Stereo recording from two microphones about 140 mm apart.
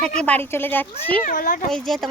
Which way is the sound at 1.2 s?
70° left (ahead or behind).